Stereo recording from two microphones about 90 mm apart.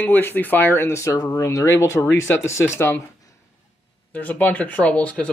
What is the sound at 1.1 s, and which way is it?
Speech, 45° left (ahead or behind).